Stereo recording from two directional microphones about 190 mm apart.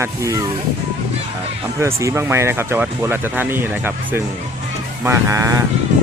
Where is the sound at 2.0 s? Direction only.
15° right (ahead or behind).